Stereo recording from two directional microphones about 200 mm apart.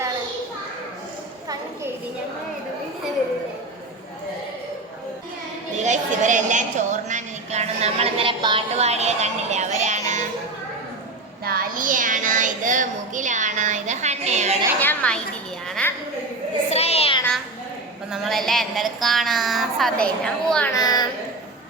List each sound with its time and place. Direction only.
5.7 s a woman's voice: 35° right (ahead or behind)
11.4 s a child's voice: 45° right (ahead or behind)
14.8 s a woman's voice: 5° left (ahead or behind)
15.6 s a sound: 5° left (ahead or behind)
16.6 s a sound: 30° left (ahead or behind)
18.1 s a woman's voice: centre (ahead or behind)
20.7 s speech: 20° left (ahead or behind)